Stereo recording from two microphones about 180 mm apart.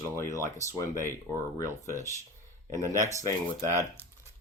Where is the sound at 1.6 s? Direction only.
15° left (ahead or behind).